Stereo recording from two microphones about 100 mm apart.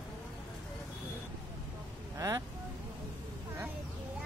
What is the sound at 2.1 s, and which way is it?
Vehicle, 35° right (ahead or behind).